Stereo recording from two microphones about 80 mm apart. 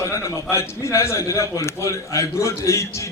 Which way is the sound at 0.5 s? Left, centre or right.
Left.